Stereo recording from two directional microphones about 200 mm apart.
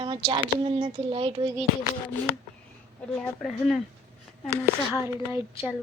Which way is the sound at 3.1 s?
Centre (ahead or behind).